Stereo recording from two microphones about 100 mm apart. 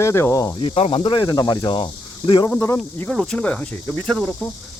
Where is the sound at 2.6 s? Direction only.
20° left (ahead or behind).